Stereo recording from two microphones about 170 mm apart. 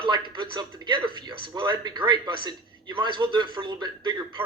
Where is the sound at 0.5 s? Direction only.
25° right (ahead or behind).